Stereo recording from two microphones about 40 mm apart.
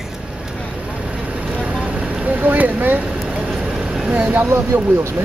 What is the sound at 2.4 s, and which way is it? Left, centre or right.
Speech, right.